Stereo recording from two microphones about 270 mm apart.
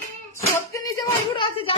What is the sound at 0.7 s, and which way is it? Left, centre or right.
Speech, centre.